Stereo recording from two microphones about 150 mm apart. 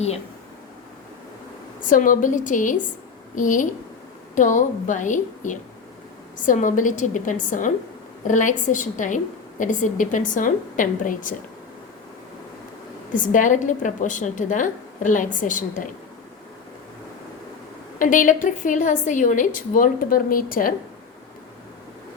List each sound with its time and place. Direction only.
1.9 s a woman's voice: 65° left (ahead or behind)
13.1 s a woman's voice: 60° left (ahead or behind)
18.0 s a woman's voice: 60° left (ahead or behind)